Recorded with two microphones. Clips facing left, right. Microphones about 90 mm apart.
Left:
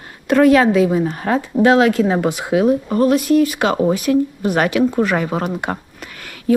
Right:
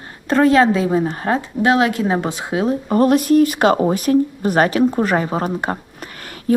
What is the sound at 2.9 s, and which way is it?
Speech, 50° right (ahead or behind).